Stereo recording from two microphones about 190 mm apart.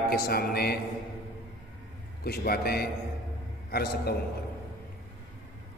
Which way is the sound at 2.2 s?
55° left (ahead or behind).